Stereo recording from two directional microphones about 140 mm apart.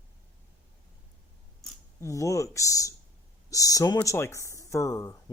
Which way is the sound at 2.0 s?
20° left (ahead or behind).